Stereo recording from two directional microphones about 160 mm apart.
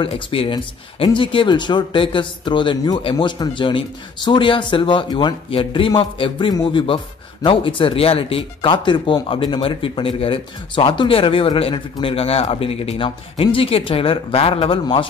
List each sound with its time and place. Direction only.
0.0 s speech: 35° left (ahead or behind)